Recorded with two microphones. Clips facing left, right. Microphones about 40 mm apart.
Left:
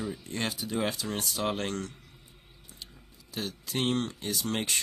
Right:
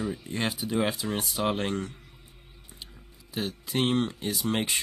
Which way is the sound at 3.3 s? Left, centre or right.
Centre.